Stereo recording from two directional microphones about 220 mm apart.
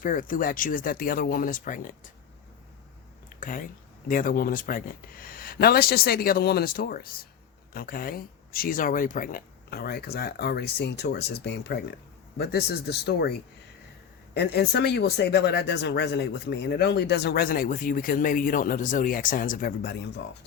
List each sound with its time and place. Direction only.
0.0 s speech: 40° left (ahead or behind)
3.4 s speech: 40° left (ahead or behind)
14.3 s speech: 45° left (ahead or behind)